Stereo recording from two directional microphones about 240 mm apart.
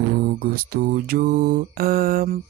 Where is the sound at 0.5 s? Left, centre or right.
Right.